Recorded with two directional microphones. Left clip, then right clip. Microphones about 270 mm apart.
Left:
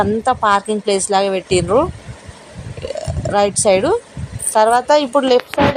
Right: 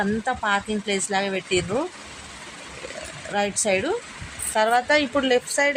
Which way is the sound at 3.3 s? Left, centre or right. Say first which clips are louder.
Left 9 dB; left.